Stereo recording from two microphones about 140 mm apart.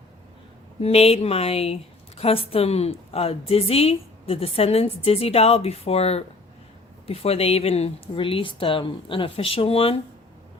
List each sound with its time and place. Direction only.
0.8 s a woman's voice: 45° left (ahead or behind)